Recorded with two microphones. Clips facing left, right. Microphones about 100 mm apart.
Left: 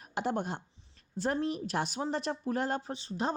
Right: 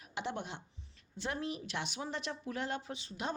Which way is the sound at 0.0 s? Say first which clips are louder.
Left 7 dB; 45° left (ahead or behind).